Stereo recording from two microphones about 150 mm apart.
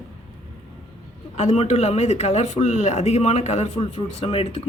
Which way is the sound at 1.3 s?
50° left (ahead or behind).